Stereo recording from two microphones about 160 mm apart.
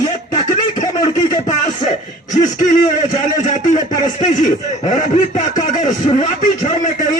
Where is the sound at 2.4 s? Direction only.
55° left (ahead or behind).